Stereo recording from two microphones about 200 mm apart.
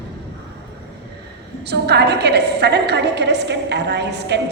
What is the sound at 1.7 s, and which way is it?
A woman's voice, 55° right (ahead or behind).